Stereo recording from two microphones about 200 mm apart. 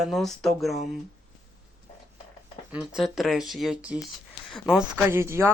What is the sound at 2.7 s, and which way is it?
Speech, 5° right (ahead or behind).